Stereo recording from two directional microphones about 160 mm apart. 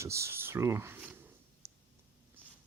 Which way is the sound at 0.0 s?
15° right (ahead or behind).